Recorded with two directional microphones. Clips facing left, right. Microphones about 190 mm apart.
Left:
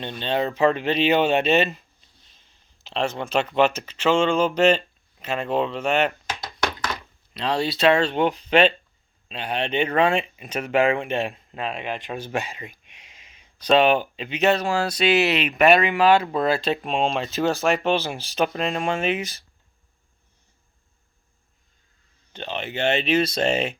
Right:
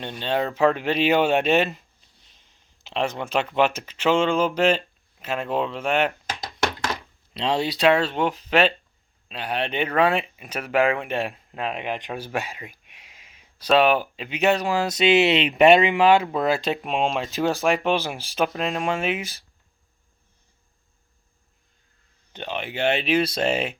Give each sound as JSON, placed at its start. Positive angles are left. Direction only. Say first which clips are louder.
{"t": 0.0, "sound": "speech", "louder": "left 1 dB", "side_deg": -10}
{"t": 2.8, "sound": "speech", "louder": "even", "side_deg": -15}
{"t": 7.3, "sound": "speech", "louder": "even", "side_deg": -20}
{"t": 12.2, "sound": "speech", "louder": "left 1 dB", "side_deg": -5}
{"t": 22.3, "sound": "speech", "louder": "even", "side_deg": -15}